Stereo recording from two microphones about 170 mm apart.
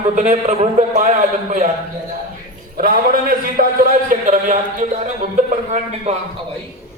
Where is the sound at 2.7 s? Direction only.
55° right (ahead or behind).